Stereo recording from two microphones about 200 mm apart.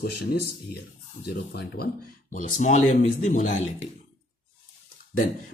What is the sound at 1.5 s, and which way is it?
Speech, 50° left (ahead or behind).